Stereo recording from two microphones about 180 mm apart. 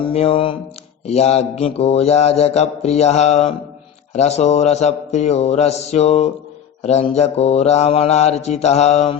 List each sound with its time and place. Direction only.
0.1 s mantra: 35° left (ahead or behind)